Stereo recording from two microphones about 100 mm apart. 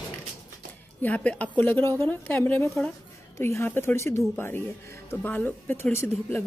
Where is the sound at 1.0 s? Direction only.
15° left (ahead or behind).